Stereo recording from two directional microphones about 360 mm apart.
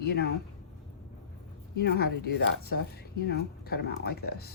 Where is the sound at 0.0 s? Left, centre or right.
Left.